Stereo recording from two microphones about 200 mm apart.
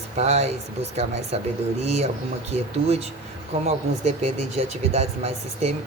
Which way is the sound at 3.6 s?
35° right (ahead or behind).